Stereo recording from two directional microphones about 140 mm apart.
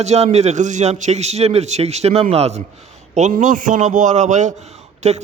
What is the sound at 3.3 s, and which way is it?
A man's voice, 65° right (ahead or behind).